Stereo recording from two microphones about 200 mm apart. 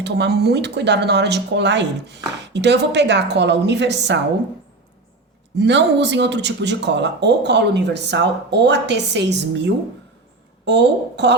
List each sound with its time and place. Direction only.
0.0 s speech: 55° right (ahead or behind)
5.5 s speech: 60° right (ahead or behind)